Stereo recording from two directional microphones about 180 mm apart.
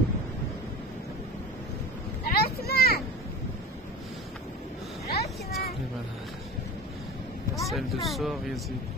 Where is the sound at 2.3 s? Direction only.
60° left (ahead or behind).